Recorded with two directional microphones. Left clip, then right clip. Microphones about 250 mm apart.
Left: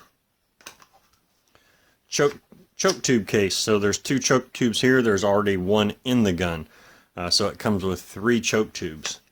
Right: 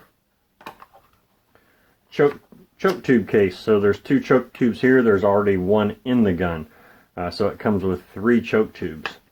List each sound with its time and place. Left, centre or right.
2.8 s speech: left